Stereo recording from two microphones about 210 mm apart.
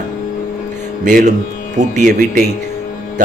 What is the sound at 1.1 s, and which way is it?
Speech, 40° right (ahead or behind).